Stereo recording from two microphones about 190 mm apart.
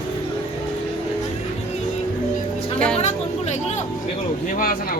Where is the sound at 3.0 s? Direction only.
35° left (ahead or behind).